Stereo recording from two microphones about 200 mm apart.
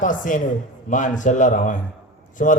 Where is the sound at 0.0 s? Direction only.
40° left (ahead or behind).